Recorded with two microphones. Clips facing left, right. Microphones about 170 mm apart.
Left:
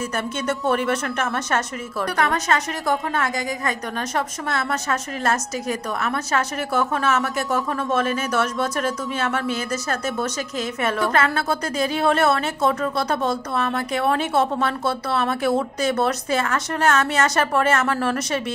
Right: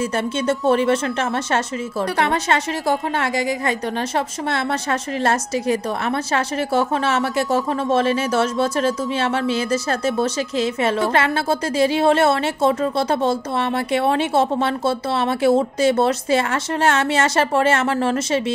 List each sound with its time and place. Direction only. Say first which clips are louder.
0.1 s a woman's voice: right 4 dB; 25° right (ahead or behind)